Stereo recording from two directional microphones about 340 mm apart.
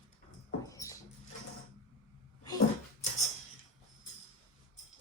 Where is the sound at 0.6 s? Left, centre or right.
Centre.